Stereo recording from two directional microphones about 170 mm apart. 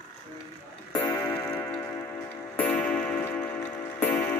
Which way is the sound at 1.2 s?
5° left (ahead or behind).